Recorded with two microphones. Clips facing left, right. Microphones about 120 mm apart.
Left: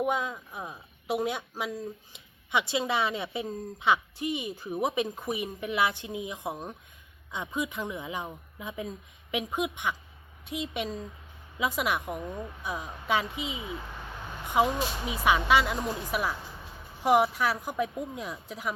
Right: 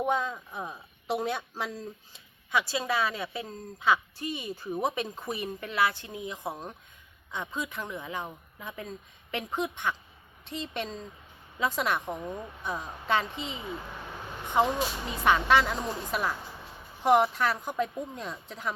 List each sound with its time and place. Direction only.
0.0 s speech: 10° left (ahead or behind)